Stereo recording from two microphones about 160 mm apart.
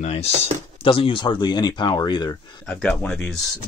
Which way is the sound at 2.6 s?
5° left (ahead or behind).